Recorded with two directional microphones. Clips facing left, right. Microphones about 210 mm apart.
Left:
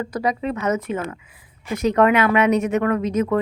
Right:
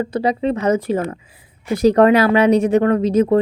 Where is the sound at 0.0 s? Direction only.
30° right (ahead or behind).